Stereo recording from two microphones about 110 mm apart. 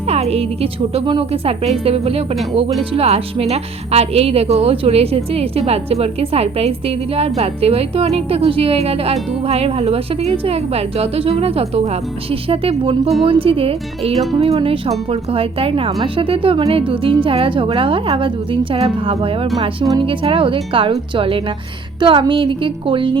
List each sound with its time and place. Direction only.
0.1 s a woman's voice: 70° right (ahead or behind); by 23.1 s 50° right (ahead or behind)